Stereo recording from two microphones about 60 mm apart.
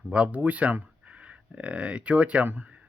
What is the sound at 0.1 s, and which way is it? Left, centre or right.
Speech, right.